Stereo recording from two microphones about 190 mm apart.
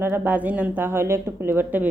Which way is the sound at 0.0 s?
10° right (ahead or behind).